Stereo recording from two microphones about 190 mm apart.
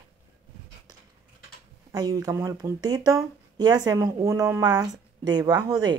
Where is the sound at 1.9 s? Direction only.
20° right (ahead or behind).